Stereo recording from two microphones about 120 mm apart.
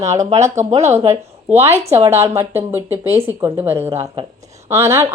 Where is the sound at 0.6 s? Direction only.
65° right (ahead or behind).